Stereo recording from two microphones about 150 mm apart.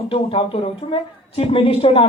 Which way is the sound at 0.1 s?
40° left (ahead or behind).